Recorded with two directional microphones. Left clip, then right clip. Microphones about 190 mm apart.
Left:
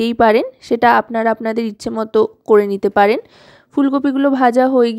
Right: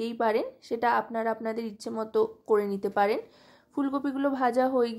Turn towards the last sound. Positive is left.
turn(degrees=40)  # may be behind; listen again after turning